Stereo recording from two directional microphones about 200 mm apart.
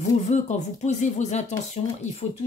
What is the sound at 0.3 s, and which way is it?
Speech, 35° left (ahead or behind).